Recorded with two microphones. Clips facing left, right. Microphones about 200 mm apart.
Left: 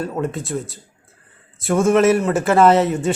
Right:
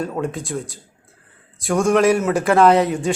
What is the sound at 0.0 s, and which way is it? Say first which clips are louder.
A man's voice: left 1 dB; centre (ahead or behind).